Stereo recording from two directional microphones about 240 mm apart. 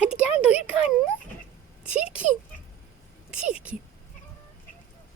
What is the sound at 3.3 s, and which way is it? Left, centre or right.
Speech, centre.